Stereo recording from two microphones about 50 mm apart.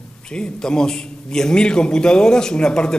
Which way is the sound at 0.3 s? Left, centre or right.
Centre.